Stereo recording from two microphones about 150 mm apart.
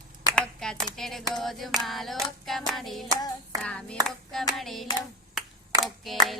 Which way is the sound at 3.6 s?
5° left (ahead or behind).